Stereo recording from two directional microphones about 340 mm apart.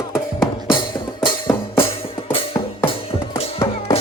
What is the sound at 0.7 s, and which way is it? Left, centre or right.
Music, centre.